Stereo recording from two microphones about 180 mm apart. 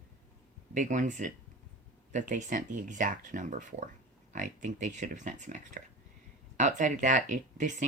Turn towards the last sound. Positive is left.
turn(degrees=-45)  # may be behind; listen again after turning